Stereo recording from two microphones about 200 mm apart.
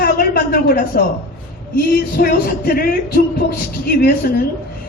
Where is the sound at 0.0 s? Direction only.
50° left (ahead or behind).